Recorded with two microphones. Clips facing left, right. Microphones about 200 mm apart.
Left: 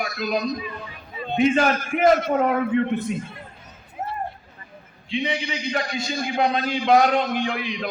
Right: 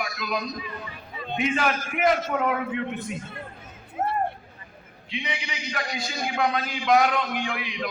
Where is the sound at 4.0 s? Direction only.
50° right (ahead or behind).